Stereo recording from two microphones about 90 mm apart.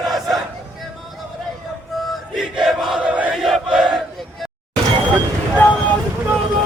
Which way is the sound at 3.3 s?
5° right (ahead or behind).